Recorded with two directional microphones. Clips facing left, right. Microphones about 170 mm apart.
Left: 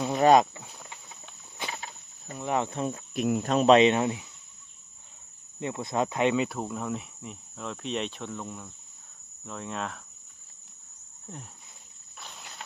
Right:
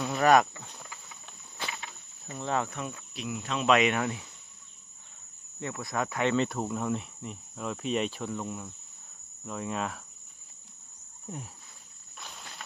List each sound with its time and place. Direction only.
0.0 s a sound: 20° left (ahead or behind)
1.7 s a sound: 35° left (ahead or behind)
2.4 s speech: 20° left (ahead or behind)
3.2 s speech: 50° left (ahead or behind)
3.7 s speech: 25° left (ahead or behind)
5.5 s speech: 20° left (ahead or behind)
6.3 s cricket: 5° left (ahead or behind)